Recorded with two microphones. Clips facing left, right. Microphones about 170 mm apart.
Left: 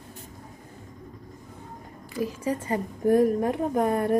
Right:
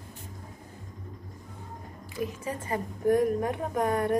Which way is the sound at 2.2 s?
30° left (ahead or behind).